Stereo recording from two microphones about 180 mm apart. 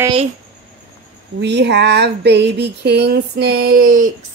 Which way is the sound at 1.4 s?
75° right (ahead or behind).